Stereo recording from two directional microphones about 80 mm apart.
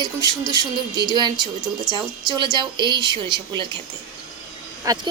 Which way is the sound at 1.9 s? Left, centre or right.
Right.